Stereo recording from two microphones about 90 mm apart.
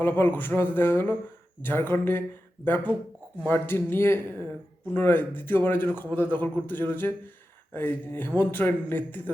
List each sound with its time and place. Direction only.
0.0 s a man's voice: 25° left (ahead or behind)